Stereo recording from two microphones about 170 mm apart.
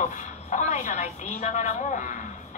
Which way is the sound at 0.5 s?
45° left (ahead or behind).